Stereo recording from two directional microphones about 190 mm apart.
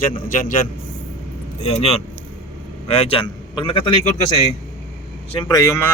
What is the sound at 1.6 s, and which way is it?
A man's voice, 35° left (ahead or behind).